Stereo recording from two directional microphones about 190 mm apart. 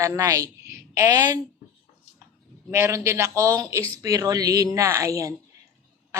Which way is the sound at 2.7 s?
15° right (ahead or behind).